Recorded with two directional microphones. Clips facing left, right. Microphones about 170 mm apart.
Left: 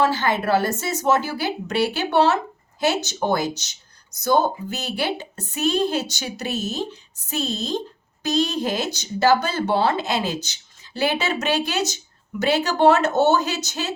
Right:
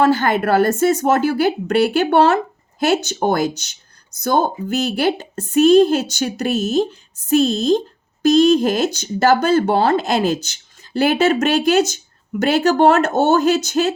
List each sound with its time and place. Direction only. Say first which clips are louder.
0.0 s speech: right 5 dB; 50° right (ahead or behind)